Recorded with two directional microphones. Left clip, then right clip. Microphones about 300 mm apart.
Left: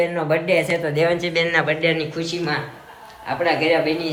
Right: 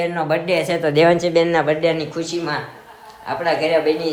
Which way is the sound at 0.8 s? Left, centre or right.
Right.